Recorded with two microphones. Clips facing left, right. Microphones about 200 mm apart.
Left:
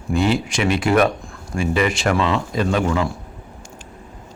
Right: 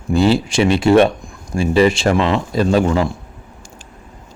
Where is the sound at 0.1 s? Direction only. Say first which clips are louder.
Right 5 dB; 30° right (ahead or behind).